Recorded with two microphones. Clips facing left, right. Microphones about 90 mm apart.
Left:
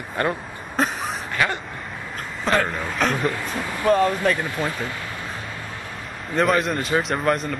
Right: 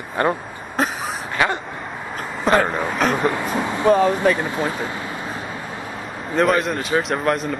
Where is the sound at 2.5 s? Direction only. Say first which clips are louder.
Right 4 dB; 5° right (ahead or behind).